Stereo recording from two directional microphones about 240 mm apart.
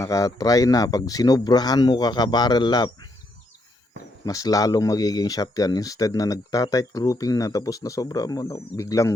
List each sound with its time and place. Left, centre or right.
0.0 s speech: centre
4.3 s speech: centre